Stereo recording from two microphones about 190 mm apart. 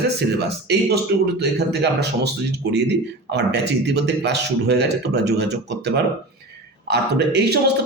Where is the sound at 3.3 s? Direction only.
60° right (ahead or behind).